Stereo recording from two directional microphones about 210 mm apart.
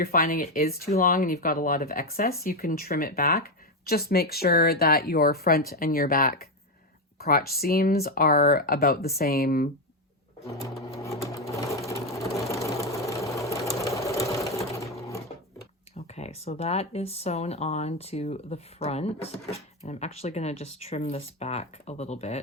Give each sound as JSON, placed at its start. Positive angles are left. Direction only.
{"t": 0.0, "sound": "speech", "side_deg": 45}
{"t": 11.0, "sound": "sewing machine", "side_deg": 15}
{"t": 16.0, "sound": "speech", "side_deg": 30}